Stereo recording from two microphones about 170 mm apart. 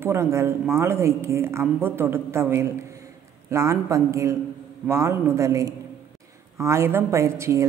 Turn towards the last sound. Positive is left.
turn(degrees=-15)  # may be behind; listen again after turning